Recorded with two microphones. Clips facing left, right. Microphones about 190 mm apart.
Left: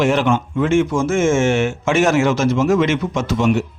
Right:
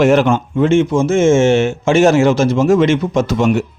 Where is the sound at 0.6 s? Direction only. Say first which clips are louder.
Right 4 dB; 25° right (ahead or behind); by 3.5 s 40° right (ahead or behind).